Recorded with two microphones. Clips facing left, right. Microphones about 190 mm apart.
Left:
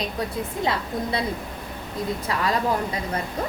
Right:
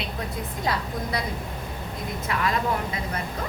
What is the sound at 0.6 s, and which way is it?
Speech, 25° left (ahead or behind).